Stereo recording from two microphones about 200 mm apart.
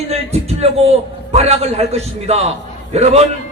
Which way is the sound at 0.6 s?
30° right (ahead or behind).